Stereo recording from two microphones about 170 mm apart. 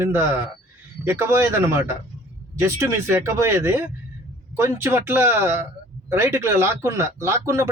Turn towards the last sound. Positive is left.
turn(degrees=-15)  # may be behind; listen again after turning